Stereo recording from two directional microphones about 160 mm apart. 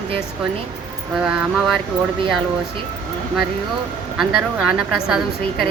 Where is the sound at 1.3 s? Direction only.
Centre (ahead or behind).